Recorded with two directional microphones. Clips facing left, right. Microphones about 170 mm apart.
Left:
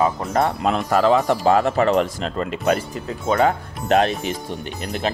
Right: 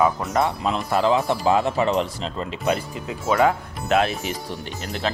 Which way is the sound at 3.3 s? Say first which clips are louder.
Left 1 dB; 30° left (ahead or behind).